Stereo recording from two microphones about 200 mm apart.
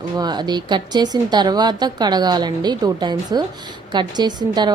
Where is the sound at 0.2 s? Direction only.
20° right (ahead or behind).